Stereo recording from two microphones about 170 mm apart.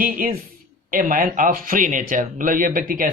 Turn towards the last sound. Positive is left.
turn(degrees=-55)  # may be behind; listen again after turning